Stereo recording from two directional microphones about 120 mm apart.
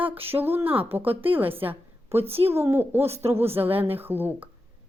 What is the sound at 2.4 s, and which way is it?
Speech, 20° right (ahead or behind).